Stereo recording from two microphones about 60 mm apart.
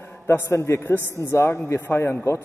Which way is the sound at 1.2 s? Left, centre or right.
Left.